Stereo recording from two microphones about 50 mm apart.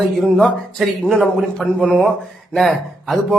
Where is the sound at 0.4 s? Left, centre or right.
Centre.